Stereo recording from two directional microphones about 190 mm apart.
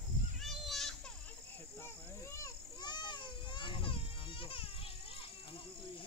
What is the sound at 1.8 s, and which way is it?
Children playing, 15° left (ahead or behind).